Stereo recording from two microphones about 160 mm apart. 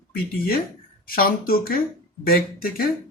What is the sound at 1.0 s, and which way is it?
A woman's voice, 65° left (ahead or behind).